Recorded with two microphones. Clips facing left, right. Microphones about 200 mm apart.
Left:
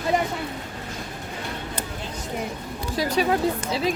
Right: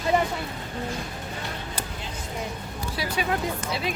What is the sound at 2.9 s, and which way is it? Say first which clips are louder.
Speech: left 6 dB; 40° left (ahead or behind).